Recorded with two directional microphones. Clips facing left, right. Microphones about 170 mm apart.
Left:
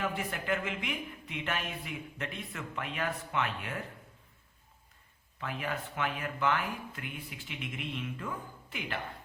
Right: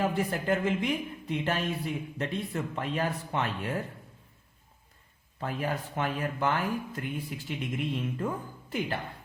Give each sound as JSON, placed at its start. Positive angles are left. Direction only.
{"t": 0.0, "sound": "speech", "side_deg": -35}
{"t": 5.4, "sound": "speech", "side_deg": -40}